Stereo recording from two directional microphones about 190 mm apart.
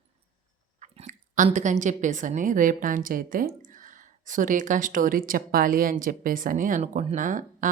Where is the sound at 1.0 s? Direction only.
40° right (ahead or behind).